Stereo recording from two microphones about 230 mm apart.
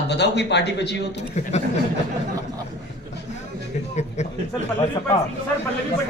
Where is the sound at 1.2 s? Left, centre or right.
Left.